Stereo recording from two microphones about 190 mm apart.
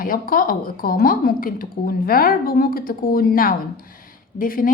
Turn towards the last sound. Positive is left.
turn(degrees=50)  # may be behind; listen again after turning